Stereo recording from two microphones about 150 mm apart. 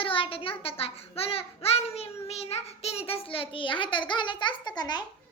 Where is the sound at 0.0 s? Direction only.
35° left (ahead or behind).